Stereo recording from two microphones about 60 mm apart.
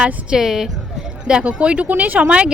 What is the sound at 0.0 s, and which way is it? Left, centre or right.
Speech, right.